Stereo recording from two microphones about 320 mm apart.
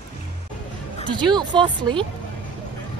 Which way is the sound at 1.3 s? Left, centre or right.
Centre.